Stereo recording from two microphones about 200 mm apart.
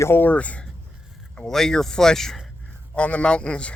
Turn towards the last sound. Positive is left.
turn(degrees=5)  # may be behind; listen again after turning